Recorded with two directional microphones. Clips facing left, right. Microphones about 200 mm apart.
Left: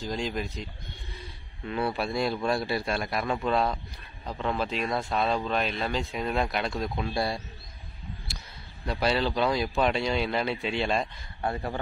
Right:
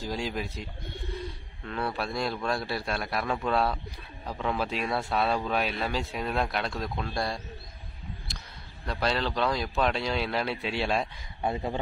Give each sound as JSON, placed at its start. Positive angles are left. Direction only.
{"t": 0.0, "sound": "speech", "side_deg": -5}
{"t": 1.6, "sound": "speech", "side_deg": 5}
{"t": 9.0, "sound": "speech", "side_deg": 5}
{"t": 11.4, "sound": "speech", "side_deg": -20}